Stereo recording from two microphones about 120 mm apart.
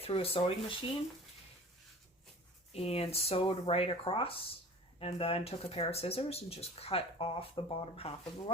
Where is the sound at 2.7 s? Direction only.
55° left (ahead or behind).